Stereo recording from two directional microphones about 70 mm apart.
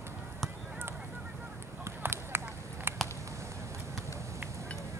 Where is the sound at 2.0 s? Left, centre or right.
Right.